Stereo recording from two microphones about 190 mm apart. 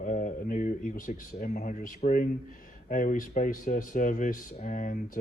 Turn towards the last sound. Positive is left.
turn(degrees=40)  # may be behind; listen again after turning